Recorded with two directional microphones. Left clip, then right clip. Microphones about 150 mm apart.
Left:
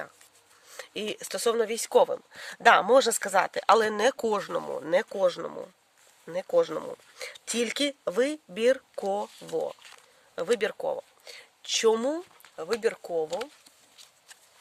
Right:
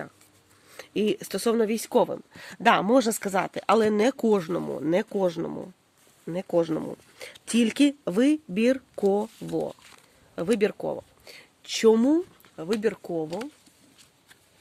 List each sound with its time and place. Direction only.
0.8 s speech: 10° left (ahead or behind)
9.0 s speech: centre (ahead or behind); by 13.2 s 20° left (ahead or behind)
13.2 s speech: 40° left (ahead or behind)